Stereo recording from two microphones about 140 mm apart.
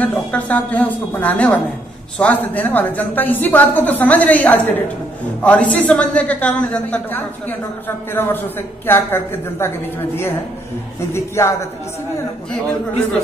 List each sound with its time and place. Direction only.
0.0 s a woman's voice: 10° left (ahead or behind)
11.1 s a man's voice: 20° left (ahead or behind)